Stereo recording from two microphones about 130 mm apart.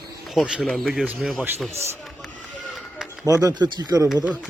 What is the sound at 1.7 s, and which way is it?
Speech, 20° right (ahead or behind).